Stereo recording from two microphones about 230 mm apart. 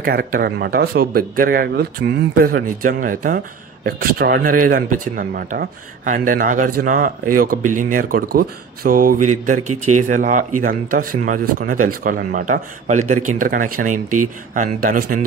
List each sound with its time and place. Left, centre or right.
0.0 s speech: right
9.6 s speech: right
9.9 s speech: right
13.9 s speech: right
14.5 s speech: right